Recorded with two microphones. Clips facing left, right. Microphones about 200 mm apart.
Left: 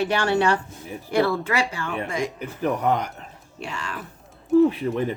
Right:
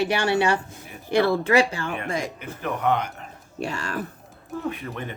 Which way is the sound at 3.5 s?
40° right (ahead or behind).